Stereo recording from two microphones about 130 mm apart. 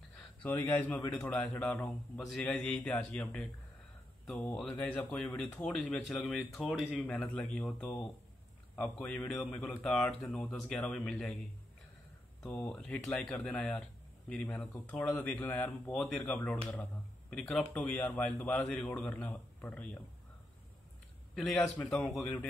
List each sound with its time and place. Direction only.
0.1 s speech: 10° left (ahead or behind)
1.3 s speech: 5° left (ahead or behind)
7.1 s speech: 10° left (ahead or behind)
12.4 s speech: 10° left (ahead or behind)
21.4 s speech: centre (ahead or behind)